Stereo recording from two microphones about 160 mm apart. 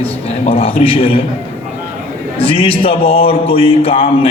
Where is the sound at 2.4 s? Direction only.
35° left (ahead or behind).